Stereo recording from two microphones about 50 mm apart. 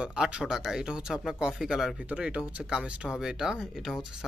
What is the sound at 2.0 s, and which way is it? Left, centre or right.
Speech, right.